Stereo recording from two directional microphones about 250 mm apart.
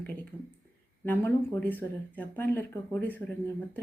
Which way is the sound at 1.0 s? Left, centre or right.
Centre.